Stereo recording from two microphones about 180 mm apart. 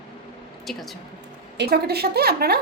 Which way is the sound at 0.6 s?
Centre (ahead or behind).